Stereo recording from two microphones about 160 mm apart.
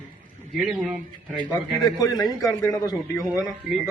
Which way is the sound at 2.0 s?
25° left (ahead or behind).